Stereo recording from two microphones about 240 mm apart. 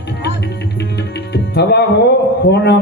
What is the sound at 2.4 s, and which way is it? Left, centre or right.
Speech, left.